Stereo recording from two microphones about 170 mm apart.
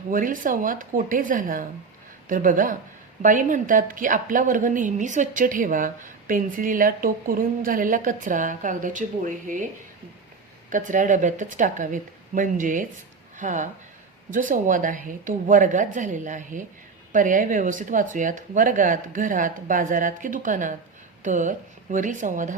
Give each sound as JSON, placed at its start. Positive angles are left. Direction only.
{"t": 0.1, "sound": "a woman's voice", "side_deg": -50}
{"t": 10.7, "sound": "a woman's voice", "side_deg": -50}